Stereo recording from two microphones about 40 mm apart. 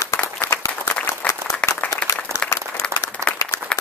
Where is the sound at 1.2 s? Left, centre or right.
Left.